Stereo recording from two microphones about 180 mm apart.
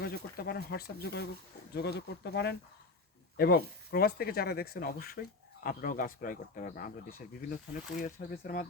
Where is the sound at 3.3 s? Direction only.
60° left (ahead or behind).